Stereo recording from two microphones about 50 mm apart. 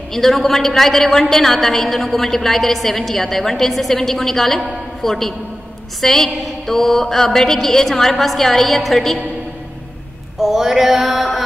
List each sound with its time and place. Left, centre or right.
0.1 s a woman's voice: centre
10.4 s mantra: centre